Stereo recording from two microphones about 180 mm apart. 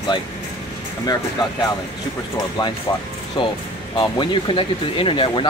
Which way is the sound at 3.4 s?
30° left (ahead or behind).